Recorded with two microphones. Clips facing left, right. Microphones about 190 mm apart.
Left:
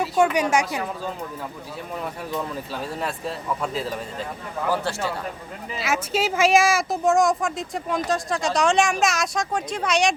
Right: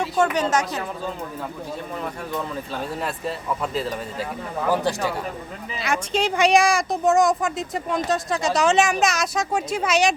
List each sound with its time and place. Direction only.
0.0 s a woman's voice: 10° left (ahead or behind)
3.0 s speech: centre (ahead or behind)
4.7 s speech: 15° right (ahead or behind)
5.7 s speech: 5° left (ahead or behind)